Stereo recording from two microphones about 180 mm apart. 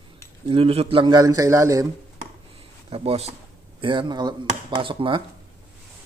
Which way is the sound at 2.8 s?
35° right (ahead or behind).